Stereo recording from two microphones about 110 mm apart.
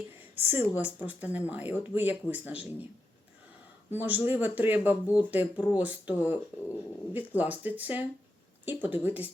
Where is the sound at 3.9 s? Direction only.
15° right (ahead or behind).